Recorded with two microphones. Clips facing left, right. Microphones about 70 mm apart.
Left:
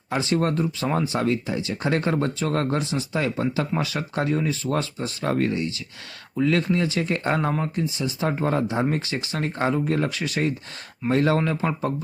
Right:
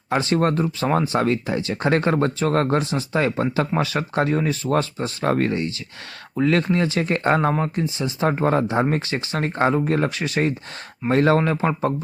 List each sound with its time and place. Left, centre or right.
0.1 s speech: right